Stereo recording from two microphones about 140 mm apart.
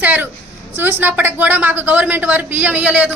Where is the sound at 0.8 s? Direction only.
15° right (ahead or behind).